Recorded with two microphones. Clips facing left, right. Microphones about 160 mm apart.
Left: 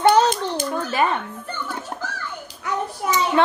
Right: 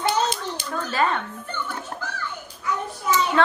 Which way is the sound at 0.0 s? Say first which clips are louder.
Left 7 dB; 50° left (ahead or behind).